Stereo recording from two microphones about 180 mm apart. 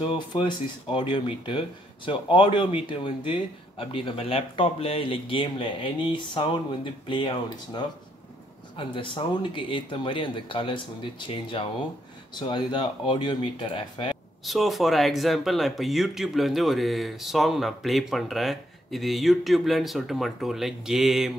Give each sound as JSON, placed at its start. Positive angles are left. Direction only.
{"t": 0.0, "sound": "speech", "side_deg": 30}
{"t": 14.4, "sound": "speech", "side_deg": 0}